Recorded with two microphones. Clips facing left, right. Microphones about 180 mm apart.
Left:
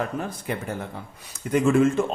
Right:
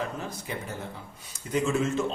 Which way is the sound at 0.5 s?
60° left (ahead or behind).